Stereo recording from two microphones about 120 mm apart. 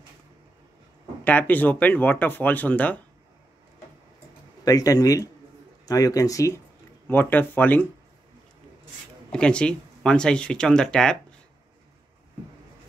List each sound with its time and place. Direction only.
1.2 s speech: 15° left (ahead or behind)
4.6 s speech: 30° left (ahead or behind)
7.1 s speech: 15° left (ahead or behind)
9.3 s speech: 10° left (ahead or behind)